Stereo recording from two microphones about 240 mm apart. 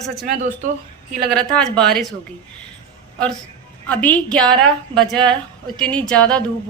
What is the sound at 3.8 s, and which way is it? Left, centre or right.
Speech, centre.